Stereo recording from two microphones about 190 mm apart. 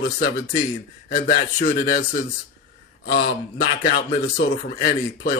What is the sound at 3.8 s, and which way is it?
Speech, 50° left (ahead or behind).